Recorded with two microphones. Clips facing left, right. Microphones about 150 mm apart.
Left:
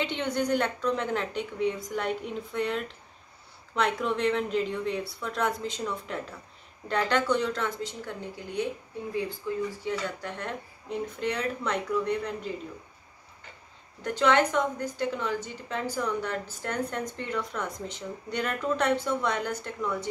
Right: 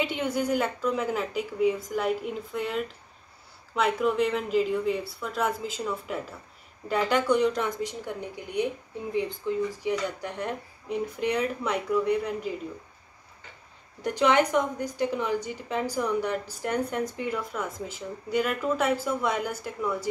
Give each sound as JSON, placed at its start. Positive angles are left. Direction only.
{"t": 0.0, "sound": "a woman's voice", "side_deg": -5}
{"t": 14.0, "sound": "a woman's voice", "side_deg": -15}